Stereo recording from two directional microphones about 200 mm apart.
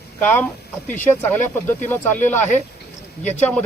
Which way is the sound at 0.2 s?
10° left (ahead or behind).